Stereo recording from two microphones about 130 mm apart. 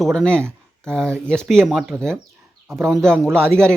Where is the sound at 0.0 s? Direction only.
5° left (ahead or behind).